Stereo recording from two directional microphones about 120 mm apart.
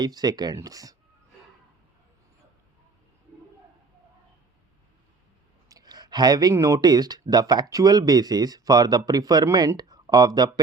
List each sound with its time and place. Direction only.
0.0 s speech: 35° right (ahead or behind)
5.6 s speech: 30° right (ahead or behind)